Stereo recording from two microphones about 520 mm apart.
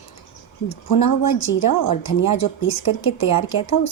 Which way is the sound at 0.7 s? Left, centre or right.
Left.